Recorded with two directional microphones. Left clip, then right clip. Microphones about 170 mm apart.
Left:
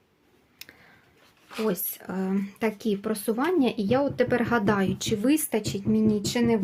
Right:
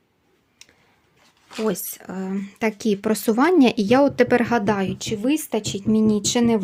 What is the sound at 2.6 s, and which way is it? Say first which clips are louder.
Speech: right 7 dB; 25° right (ahead or behind).